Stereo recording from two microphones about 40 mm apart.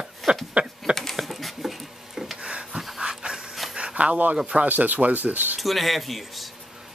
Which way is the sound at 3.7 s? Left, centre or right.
Right.